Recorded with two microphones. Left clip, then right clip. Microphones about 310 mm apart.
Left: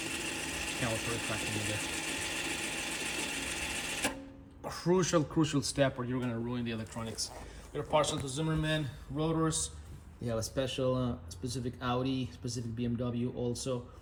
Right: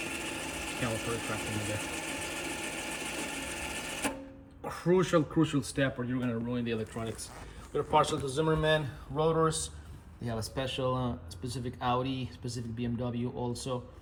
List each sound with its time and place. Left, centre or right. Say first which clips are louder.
0.0 s sewing machine: even; centre
4.6 s speech: right 2 dB; centre